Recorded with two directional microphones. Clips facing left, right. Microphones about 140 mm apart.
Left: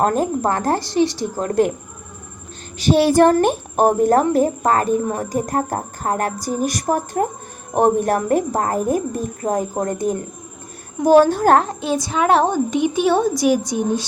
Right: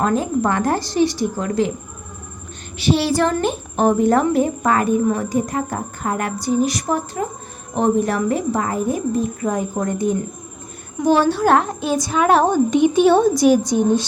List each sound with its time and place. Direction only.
0.0 s a woman's voice: 45° left (ahead or behind)
2.7 s a woman's voice: 45° left (ahead or behind)
11.7 s a woman's voice: 25° left (ahead or behind)
12.7 s speech: 5° left (ahead or behind)